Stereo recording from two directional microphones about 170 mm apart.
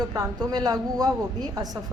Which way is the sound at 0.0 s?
20° right (ahead or behind).